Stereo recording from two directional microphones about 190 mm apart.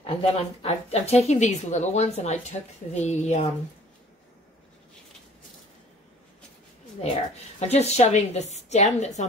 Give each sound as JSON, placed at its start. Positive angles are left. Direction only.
{"t": 0.0, "sound": "a woman's voice", "side_deg": 30}
{"t": 7.0, "sound": "a woman's voice", "side_deg": 35}